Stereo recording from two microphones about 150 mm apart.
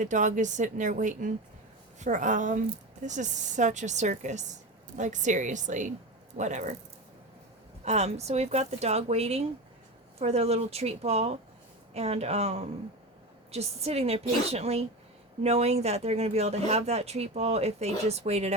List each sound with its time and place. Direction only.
0.0 s a woman's voice: 55° right (ahead or behind)
7.9 s speech: 45° right (ahead or behind)